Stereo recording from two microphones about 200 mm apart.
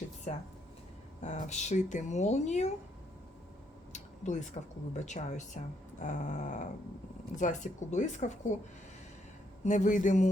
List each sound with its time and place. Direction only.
0.3 s speech: 35° left (ahead or behind)
3.9 s a sound: 35° left (ahead or behind)
5.0 s speech: 35° left (ahead or behind)
9.6 s speech: 40° left (ahead or behind)